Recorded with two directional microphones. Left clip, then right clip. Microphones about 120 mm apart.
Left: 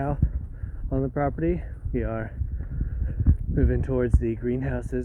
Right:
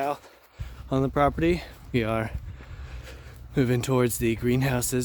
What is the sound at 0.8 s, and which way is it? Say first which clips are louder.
Speech: right 4 dB; 30° right (ahead or behind).